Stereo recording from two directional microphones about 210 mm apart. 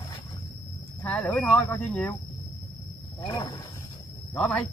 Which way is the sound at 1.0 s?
5° left (ahead or behind).